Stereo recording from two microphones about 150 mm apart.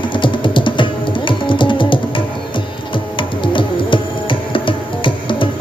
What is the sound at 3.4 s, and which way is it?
Music, 35° left (ahead or behind).